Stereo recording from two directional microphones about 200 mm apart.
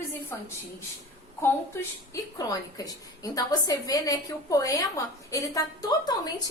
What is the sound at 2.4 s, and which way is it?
A woman's voice, 15° left (ahead or behind).